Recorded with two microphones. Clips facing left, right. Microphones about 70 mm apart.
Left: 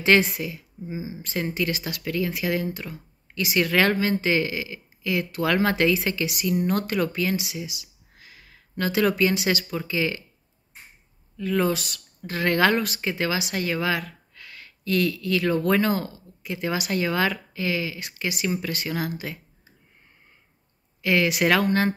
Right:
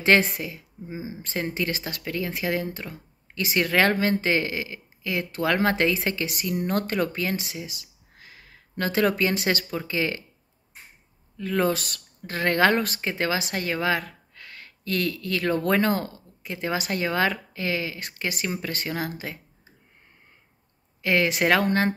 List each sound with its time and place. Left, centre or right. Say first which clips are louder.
0.0 s speech: left 1 dB; right
11.3 s speech: even; right
16.5 s speech: left 1 dB; right
21.0 s speech: left 1 dB; right